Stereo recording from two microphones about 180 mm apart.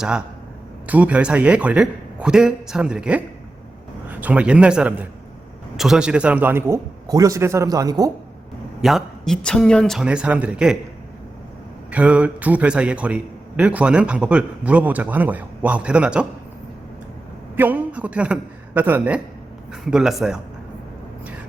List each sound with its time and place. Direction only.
0.9 s a man's voice: 10° right (ahead or behind)
8.8 s speech: centre (ahead or behind)
11.9 s a man's voice: 5° right (ahead or behind)
17.6 s a man's voice: 10° right (ahead or behind)